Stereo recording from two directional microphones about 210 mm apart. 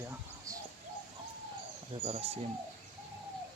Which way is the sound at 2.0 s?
30° right (ahead or behind).